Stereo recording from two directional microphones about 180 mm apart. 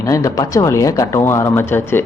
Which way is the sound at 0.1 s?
20° left (ahead or behind).